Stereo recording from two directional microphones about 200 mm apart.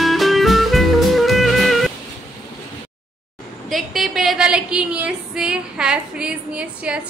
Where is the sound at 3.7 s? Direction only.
Centre (ahead or behind).